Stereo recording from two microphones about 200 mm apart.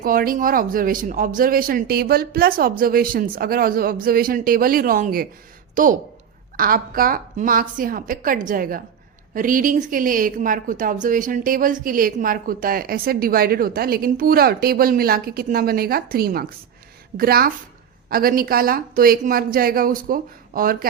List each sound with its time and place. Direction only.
0.0 s a woman's voice: 45° right (ahead or behind)